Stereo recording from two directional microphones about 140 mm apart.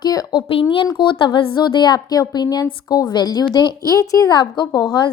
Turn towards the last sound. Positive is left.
turn(degrees=30)  # may be behind; listen again after turning